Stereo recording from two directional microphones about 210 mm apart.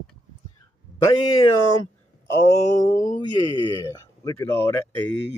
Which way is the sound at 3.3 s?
20° left (ahead or behind).